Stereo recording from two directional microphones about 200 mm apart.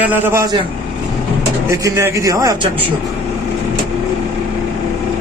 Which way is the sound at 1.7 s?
15° right (ahead or behind).